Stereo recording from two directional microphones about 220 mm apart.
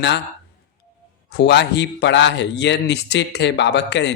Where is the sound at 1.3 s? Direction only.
50° left (ahead or behind).